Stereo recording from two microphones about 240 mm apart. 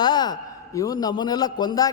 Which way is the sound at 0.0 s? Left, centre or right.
Centre.